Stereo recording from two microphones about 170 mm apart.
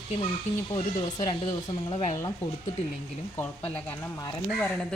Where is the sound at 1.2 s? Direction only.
20° left (ahead or behind).